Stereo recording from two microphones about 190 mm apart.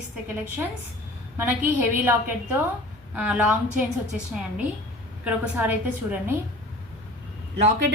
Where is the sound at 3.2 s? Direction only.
5° right (ahead or behind).